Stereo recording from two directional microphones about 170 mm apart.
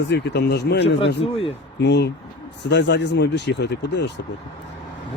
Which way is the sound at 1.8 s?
90° left.